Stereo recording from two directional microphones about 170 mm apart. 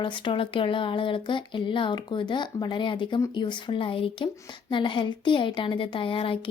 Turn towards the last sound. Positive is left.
turn(degrees=30)  # may be behind; listen again after turning